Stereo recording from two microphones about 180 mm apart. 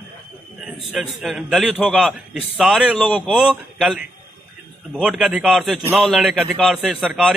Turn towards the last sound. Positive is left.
turn(degrees=-5)  # may be behind; listen again after turning